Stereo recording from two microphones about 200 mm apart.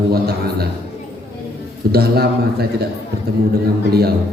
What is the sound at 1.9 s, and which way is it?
Speech, 50° right (ahead or behind).